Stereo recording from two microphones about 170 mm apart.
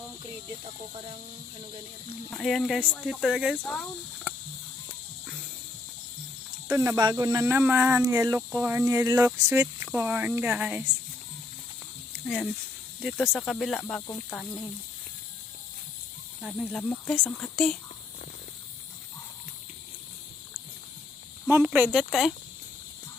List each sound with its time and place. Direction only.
2.3 s speech: centre (ahead or behind)
3.6 s speech: 5° left (ahead or behind)
6.7 s speech: 15° right (ahead or behind)
13.0 s speech: centre (ahead or behind)
16.4 s speech: centre (ahead or behind)
21.5 s speech: 10° right (ahead or behind)